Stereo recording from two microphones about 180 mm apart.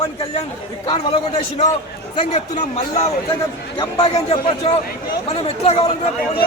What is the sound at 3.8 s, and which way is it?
A man's voice, 30° left (ahead or behind).